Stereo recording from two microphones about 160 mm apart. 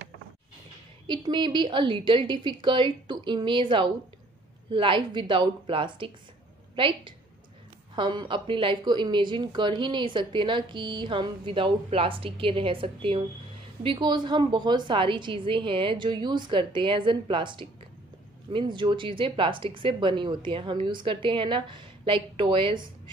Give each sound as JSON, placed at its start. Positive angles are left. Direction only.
{"t": 1.0, "sound": "a woman's voice", "side_deg": -30}